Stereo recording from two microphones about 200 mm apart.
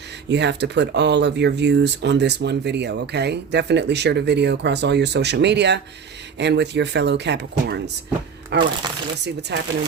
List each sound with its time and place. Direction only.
0.3 s speech: 60° right (ahead or behind)